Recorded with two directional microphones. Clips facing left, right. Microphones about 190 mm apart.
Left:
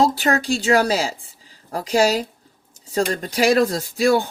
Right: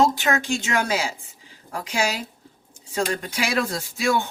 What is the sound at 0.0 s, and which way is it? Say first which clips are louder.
A woman's voice: left 2 dB; 35° left (ahead or behind).